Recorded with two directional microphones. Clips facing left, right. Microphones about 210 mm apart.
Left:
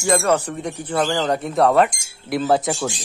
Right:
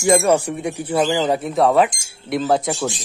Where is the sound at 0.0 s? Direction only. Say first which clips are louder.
Right 3 dB; 10° right (ahead or behind).